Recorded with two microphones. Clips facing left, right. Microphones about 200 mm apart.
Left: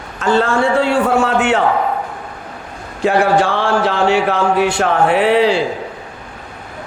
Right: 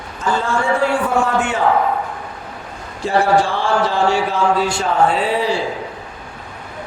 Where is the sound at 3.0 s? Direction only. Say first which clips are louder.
Left 2 dB; 65° left (ahead or behind).